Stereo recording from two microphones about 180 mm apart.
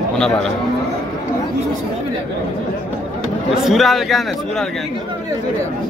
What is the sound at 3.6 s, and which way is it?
Speech, centre (ahead or behind).